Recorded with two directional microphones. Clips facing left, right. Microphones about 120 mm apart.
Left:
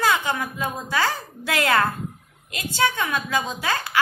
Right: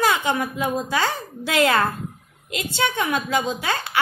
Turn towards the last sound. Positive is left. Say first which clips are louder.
# right 1 dB
turn(degrees=-25)  # may be behind; listen again after turning